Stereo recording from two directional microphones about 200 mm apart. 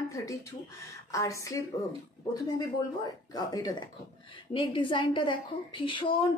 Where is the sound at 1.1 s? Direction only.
15° left (ahead or behind).